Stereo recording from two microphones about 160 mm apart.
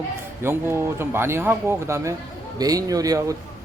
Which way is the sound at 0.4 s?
15° right (ahead or behind).